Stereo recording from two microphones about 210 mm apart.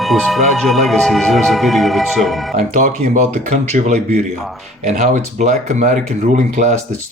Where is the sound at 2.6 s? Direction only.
35° right (ahead or behind).